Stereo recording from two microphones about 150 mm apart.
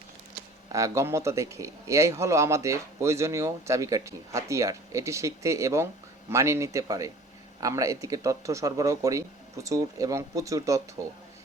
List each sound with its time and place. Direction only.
0.7 s speech: 20° right (ahead or behind)